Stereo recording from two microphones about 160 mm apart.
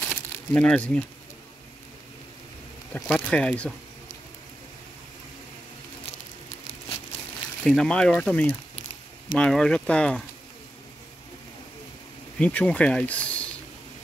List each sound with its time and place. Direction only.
0.0 s crumpling: 10° left (ahead or behind)
2.9 s speech: 5° left (ahead or behind)
7.6 s speech: 5° left (ahead or behind)
12.4 s speech: 10° left (ahead or behind)